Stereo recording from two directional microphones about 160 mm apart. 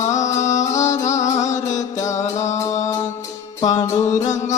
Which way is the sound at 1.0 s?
45° left (ahead or behind).